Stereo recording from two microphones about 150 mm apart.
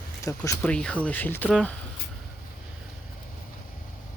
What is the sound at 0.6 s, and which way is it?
Speech, 5° left (ahead or behind).